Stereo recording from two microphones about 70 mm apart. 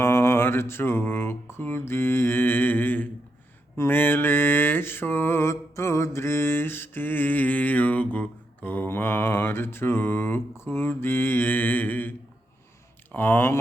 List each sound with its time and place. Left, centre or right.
0.0 s mantra: left
13.1 s speech: left